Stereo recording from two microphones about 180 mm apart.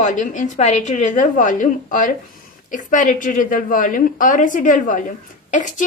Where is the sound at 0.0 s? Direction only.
45° left (ahead or behind).